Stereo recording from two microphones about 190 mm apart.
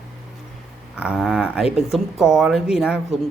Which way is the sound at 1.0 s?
5° right (ahead or behind).